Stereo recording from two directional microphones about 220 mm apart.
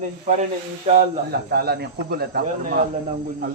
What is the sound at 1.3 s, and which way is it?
Speech, 45° right (ahead or behind).